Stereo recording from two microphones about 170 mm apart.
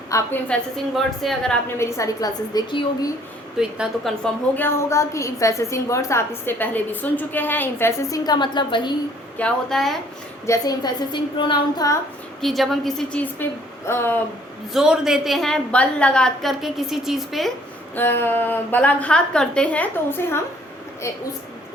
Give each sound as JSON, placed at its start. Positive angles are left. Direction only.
{"t": 0.1, "sound": "a woman's voice", "side_deg": 15}
{"t": 1.8, "sound": "a woman's voice", "side_deg": 20}
{"t": 3.6, "sound": "a woman's voice", "side_deg": 0}
{"t": 9.4, "sound": "a woman's voice", "side_deg": 0}
{"t": 10.4, "sound": "a woman's voice", "side_deg": 20}
{"t": 12.4, "sound": "a woman's voice", "side_deg": 0}
{"t": 14.7, "sound": "a woman's voice", "side_deg": -5}
{"t": 17.9, "sound": "a woman's voice", "side_deg": 10}